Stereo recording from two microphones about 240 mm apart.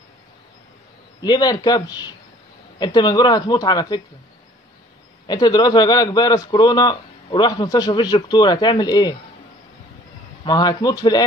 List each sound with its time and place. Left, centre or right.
1.2 s a man's voice: centre
5.2 s a man's voice: centre
10.4 s a man's voice: centre